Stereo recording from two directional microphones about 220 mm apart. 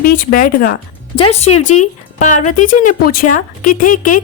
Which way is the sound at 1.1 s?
25° left (ahead or behind).